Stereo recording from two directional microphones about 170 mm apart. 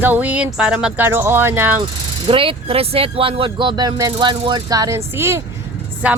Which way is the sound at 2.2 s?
30° right (ahead or behind).